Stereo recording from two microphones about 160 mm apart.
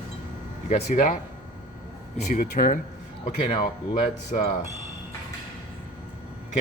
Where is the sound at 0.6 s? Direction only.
50° left (ahead or behind).